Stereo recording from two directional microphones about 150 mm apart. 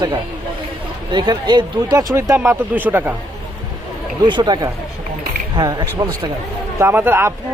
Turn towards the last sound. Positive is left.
turn(degrees=-15)  # may be behind; listen again after turning